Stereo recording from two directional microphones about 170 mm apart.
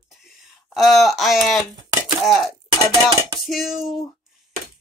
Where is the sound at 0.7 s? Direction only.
Centre (ahead or behind).